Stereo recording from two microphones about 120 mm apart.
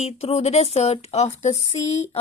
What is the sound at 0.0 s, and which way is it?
Speech, 60° left (ahead or behind).